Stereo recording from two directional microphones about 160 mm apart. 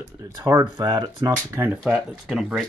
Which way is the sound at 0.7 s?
25° right (ahead or behind).